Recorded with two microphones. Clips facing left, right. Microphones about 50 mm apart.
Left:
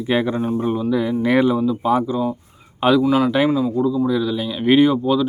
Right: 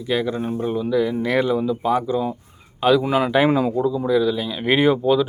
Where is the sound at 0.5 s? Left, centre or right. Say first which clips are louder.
Right 1 dB; centre.